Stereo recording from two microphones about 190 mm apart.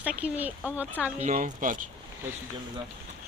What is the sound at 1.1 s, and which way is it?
Speech, 40° right (ahead or behind).